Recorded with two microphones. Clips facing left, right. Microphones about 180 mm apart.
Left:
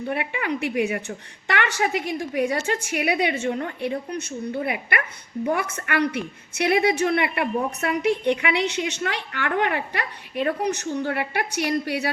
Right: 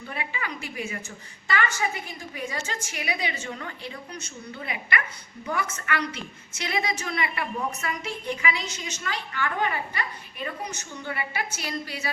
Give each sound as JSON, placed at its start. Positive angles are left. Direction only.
{"t": 0.1, "sound": "a woman's voice", "side_deg": 60}